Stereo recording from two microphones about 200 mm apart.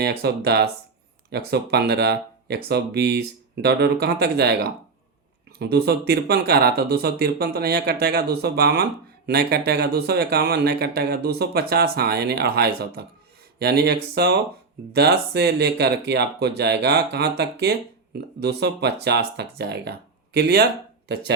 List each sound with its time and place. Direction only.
0.0 s speech: 55° right (ahead or behind)